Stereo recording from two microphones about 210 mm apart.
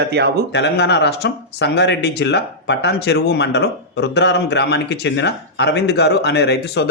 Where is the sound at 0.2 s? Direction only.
50° right (ahead or behind).